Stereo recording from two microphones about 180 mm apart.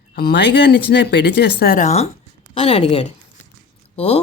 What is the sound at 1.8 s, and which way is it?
A woman's voice, 35° left (ahead or behind).